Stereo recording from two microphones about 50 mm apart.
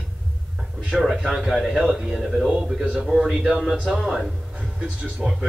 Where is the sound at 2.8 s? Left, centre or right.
Right.